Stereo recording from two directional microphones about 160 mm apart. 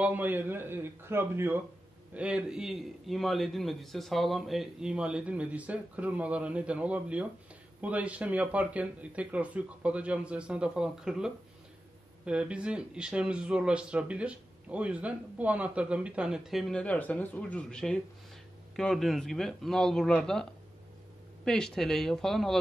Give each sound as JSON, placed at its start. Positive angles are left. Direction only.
{"t": 0.0, "sound": "speech", "side_deg": -10}
{"t": 21.5, "sound": "speech", "side_deg": 5}